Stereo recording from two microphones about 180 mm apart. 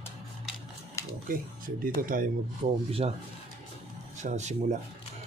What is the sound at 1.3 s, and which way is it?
Speech, 50° right (ahead or behind).